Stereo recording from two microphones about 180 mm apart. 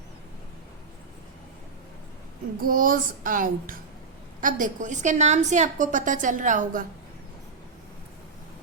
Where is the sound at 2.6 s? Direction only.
50° right (ahead or behind).